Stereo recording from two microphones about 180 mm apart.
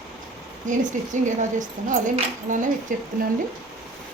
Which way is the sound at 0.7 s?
45° right (ahead or behind).